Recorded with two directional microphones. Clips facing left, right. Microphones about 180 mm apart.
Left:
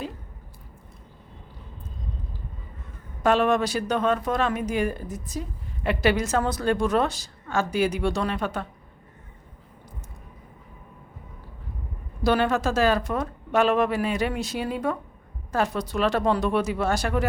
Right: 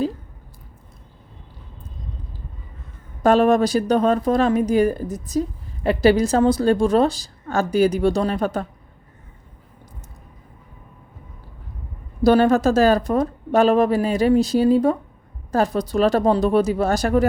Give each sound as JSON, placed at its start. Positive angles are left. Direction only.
{"t": 3.2, "sound": "speech", "side_deg": -40}
{"t": 12.2, "sound": "speech", "side_deg": -40}